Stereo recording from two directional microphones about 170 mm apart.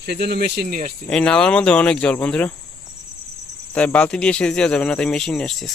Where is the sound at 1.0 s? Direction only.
5° left (ahead or behind).